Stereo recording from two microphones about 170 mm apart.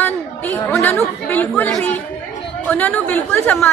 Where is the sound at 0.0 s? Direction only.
10° left (ahead or behind).